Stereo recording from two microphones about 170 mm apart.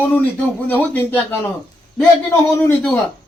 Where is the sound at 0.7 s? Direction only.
10° left (ahead or behind).